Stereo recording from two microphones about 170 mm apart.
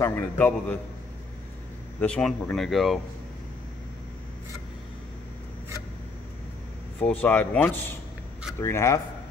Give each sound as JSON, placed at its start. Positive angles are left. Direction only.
{"t": 0.0, "sound": "speech", "side_deg": 10}
{"t": 2.0, "sound": "speech", "side_deg": 5}
{"t": 7.0, "sound": "speech", "side_deg": 10}